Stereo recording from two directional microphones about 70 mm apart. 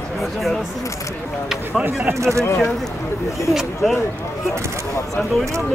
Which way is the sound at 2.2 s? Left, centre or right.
Right.